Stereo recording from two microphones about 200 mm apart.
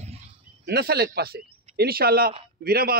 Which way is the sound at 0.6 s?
50° right (ahead or behind).